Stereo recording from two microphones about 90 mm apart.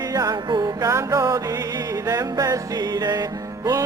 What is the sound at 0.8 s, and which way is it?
Music, 35° right (ahead or behind).